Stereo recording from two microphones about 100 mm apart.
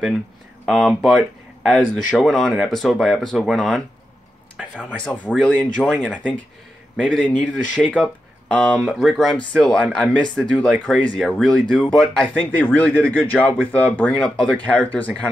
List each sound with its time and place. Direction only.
0.7 s speech: 5° left (ahead or behind)
9.0 s speech: centre (ahead or behind)